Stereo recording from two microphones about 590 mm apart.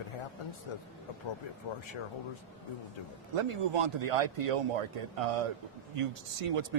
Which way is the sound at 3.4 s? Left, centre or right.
Right.